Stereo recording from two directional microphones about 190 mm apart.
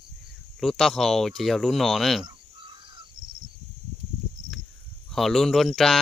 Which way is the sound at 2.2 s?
25° right (ahead or behind).